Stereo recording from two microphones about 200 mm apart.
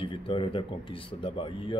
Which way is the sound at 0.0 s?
25° left (ahead or behind).